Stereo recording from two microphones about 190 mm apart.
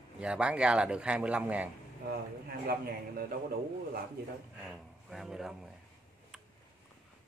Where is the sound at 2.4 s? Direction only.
50° right (ahead or behind).